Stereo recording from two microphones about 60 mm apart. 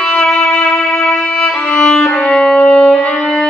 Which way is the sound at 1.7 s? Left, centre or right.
Centre.